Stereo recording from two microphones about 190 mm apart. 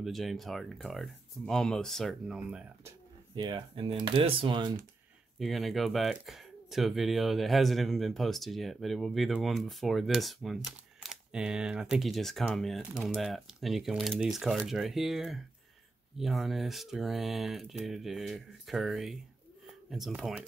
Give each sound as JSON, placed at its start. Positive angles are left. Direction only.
{"t": 0.0, "sound": "speech", "side_deg": 0}
{"t": 3.3, "sound": "speech", "side_deg": -25}
{"t": 5.4, "sound": "speech", "side_deg": 0}